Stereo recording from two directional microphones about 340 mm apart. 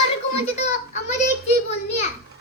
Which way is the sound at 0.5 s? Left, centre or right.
Centre.